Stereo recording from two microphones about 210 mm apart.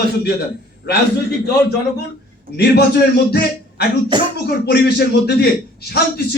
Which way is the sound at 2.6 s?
50° left (ahead or behind).